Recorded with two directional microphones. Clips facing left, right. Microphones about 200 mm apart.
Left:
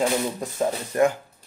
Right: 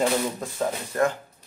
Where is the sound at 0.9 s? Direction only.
15° left (ahead or behind).